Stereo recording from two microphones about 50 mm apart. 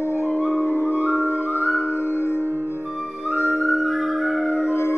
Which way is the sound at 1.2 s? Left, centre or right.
Left.